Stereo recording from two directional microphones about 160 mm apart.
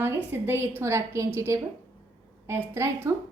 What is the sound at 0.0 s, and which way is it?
A woman's voice, 15° right (ahead or behind).